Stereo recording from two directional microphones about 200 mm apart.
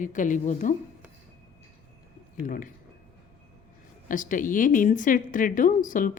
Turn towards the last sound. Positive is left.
turn(degrees=40)  # may be behind; listen again after turning